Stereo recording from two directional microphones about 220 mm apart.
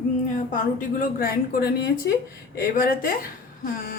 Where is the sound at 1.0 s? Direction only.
40° left (ahead or behind).